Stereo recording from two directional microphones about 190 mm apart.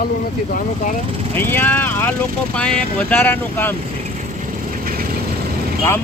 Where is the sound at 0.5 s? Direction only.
45° left (ahead or behind).